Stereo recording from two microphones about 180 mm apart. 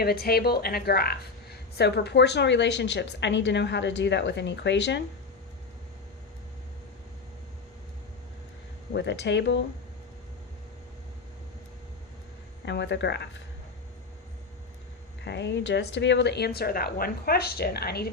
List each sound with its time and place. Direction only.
0.0 s a woman's voice: 60° left (ahead or behind)
8.9 s a woman's voice: 75° left (ahead or behind)
12.6 s a woman's voice: 75° left (ahead or behind)
15.2 s speech: 75° left (ahead or behind)